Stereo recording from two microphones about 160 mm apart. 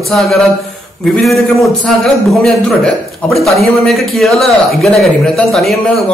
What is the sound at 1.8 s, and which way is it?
A man's voice, centre (ahead or behind).